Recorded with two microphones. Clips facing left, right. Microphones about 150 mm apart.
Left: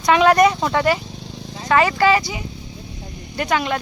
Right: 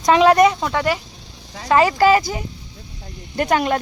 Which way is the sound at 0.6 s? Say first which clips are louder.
Left 2 dB; centre (ahead or behind).